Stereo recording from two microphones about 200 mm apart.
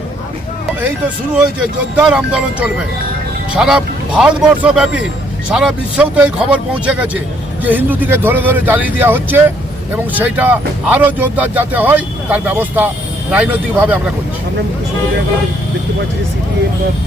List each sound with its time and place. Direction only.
0.8 s speech: 10° right (ahead or behind)